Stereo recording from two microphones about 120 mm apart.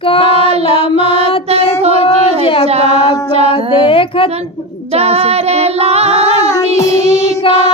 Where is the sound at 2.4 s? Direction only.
50° left (ahead or behind).